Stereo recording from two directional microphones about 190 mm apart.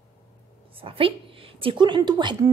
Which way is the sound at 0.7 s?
30° right (ahead or behind).